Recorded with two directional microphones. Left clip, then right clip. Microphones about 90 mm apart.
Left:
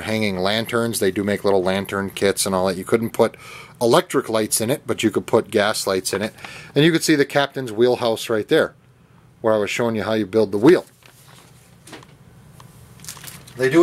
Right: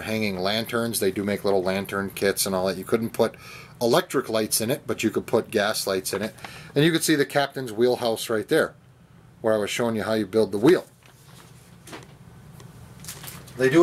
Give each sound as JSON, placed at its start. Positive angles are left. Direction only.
{"t": 0.0, "sound": "speech", "side_deg": 30}